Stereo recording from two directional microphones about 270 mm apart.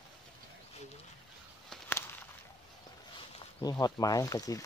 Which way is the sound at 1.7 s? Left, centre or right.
Centre.